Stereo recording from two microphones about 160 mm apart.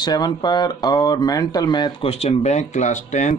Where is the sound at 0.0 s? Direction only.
25° left (ahead or behind); by 3.3 s 50° left (ahead or behind).